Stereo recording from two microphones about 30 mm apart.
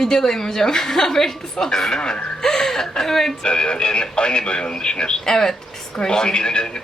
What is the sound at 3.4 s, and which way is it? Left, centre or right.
A man's voice, left.